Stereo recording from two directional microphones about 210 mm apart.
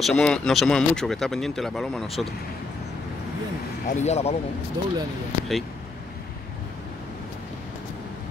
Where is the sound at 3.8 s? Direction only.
35° left (ahead or behind).